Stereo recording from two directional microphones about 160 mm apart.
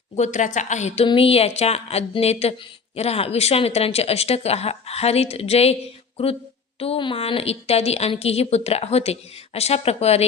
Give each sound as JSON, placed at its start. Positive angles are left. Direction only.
{"t": 0.2, "sound": "a woman's voice", "side_deg": 50}
{"t": 1.0, "sound": "a woman's voice", "side_deg": 35}
{"t": 6.7, "sound": "a woman's voice", "side_deg": 35}